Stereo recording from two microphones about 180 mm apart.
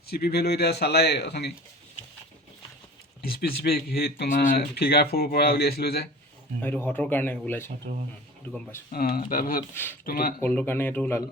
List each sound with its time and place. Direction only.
0.1 s speech: 60° left (ahead or behind)
3.2 s speech: 60° left (ahead or behind)
6.6 s speech: 10° left (ahead or behind)
8.9 s speech: 55° left (ahead or behind)
10.4 s speech: 10° left (ahead or behind)